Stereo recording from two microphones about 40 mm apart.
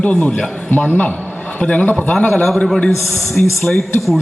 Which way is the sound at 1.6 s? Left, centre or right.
Left.